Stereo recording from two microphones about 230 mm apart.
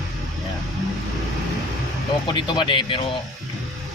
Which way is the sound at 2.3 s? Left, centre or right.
Left.